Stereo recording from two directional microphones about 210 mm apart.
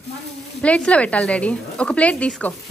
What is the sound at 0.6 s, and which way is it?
Speech, 5° left (ahead or behind).